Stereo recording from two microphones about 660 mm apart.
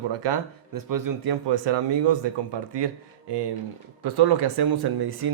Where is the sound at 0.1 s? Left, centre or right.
Right.